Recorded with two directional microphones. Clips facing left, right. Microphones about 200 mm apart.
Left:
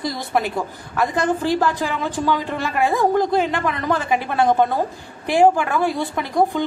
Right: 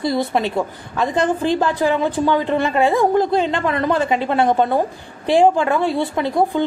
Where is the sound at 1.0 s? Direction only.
20° right (ahead or behind).